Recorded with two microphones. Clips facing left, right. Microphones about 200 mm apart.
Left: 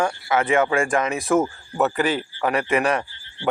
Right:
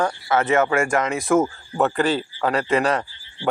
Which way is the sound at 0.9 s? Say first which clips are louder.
Right 1 dB; 15° left (ahead or behind).